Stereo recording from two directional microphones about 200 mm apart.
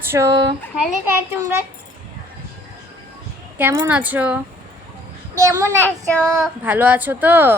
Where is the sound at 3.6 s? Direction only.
10° right (ahead or behind).